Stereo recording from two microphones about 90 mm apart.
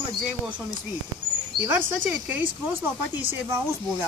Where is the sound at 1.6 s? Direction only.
20° right (ahead or behind).